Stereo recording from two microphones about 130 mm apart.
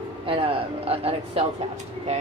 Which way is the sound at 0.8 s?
50° right (ahead or behind).